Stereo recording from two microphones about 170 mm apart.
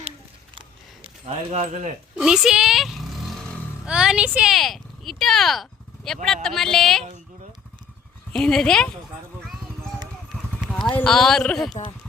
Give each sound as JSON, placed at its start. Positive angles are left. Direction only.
{"t": 1.3, "sound": "speech", "side_deg": -35}
{"t": 2.1, "sound": "speech", "side_deg": -5}
{"t": 8.3, "sound": "speech", "side_deg": 5}
{"t": 10.3, "sound": "clip-clop", "side_deg": 10}
{"t": 10.9, "sound": "speech", "side_deg": 5}